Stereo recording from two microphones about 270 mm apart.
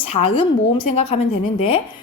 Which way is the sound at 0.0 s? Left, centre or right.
Left.